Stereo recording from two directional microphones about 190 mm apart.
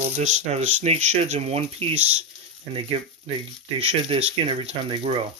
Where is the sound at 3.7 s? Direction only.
30° right (ahead or behind).